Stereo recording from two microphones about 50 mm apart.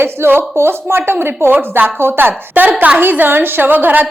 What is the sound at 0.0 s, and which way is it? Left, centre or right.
Speech, right.